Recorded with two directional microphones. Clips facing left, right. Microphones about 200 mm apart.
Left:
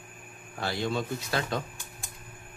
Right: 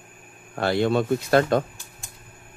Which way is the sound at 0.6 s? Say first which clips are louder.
Right 9 dB; 60° right (ahead or behind).